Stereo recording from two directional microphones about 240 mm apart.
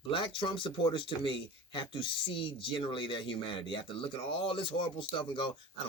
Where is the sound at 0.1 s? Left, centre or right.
Left.